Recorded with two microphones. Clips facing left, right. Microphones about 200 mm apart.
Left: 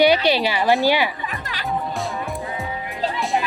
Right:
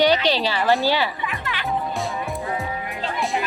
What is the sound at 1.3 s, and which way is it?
Music, 40° left (ahead or behind).